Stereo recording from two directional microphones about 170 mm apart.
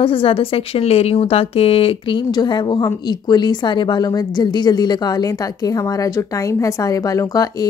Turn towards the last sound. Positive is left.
turn(degrees=20)  # may be behind; listen again after turning